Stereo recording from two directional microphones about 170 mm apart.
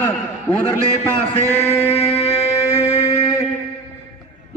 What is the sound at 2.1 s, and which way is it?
Music, 35° left (ahead or behind).